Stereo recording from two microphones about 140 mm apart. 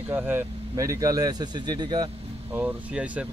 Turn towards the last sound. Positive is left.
turn(degrees=-10)  # may be behind; listen again after turning